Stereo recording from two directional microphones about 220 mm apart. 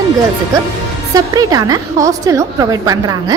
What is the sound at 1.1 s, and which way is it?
A woman's voice, 15° right (ahead or behind).